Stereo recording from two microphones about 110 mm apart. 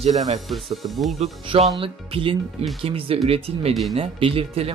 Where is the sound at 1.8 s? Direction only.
55° right (ahead or behind).